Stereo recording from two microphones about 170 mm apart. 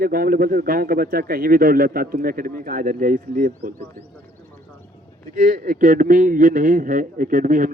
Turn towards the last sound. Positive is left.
turn(degrees=-50)  # may be behind; listen again after turning